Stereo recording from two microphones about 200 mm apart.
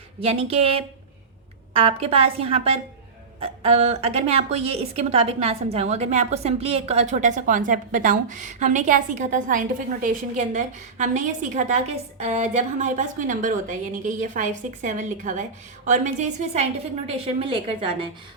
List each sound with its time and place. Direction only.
0.2 s a woman's voice: 30° right (ahead or behind)